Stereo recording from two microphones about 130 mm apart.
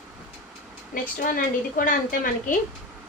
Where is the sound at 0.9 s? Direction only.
90° left.